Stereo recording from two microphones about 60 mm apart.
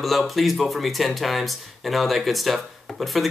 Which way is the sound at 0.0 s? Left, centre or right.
Centre.